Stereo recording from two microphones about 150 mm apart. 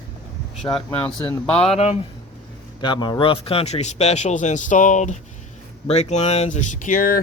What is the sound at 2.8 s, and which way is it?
Speech, 30° left (ahead or behind).